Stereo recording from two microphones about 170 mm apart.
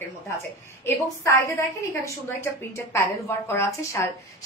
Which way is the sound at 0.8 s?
20° left (ahead or behind).